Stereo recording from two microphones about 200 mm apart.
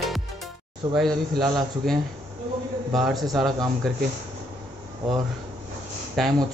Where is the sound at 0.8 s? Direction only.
20° right (ahead or behind).